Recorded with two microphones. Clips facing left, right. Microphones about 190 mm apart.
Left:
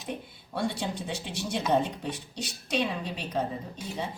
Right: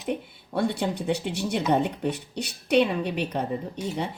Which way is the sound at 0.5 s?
60° right (ahead or behind).